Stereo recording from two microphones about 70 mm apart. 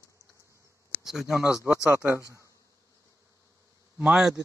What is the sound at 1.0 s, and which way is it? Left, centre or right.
Speech, centre.